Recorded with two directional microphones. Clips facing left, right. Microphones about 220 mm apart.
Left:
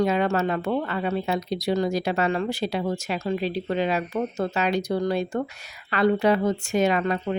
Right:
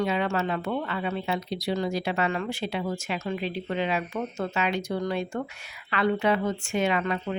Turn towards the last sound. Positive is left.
turn(degrees=40)  # may be behind; listen again after turning